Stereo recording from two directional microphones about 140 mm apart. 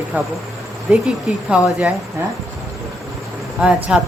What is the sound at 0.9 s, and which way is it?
Speech, 5° right (ahead or behind).